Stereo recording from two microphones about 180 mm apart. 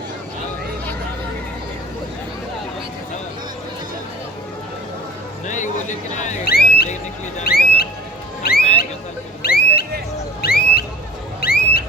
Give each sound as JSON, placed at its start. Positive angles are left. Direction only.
{"t": 5.5, "sound": "speech", "side_deg": 40}
{"t": 6.4, "sound": "music", "side_deg": 60}
{"t": 7.4, "sound": "speech", "side_deg": 60}
{"t": 8.4, "sound": "a sound", "side_deg": 60}